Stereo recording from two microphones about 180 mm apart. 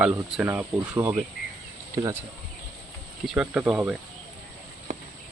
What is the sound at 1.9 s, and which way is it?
Speech, 20° right (ahead or behind).